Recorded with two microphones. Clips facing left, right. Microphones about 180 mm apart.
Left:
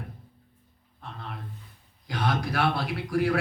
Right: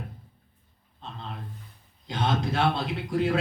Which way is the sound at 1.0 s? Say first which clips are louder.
Right 1 dB; 25° right (ahead or behind).